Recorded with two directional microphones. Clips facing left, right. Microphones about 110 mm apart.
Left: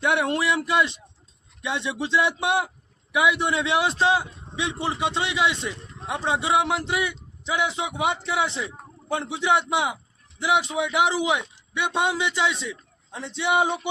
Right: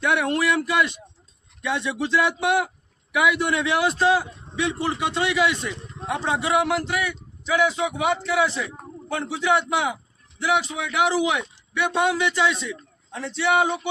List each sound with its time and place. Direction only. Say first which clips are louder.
0.0 s speech: right 1 dB; 25° left (ahead or behind)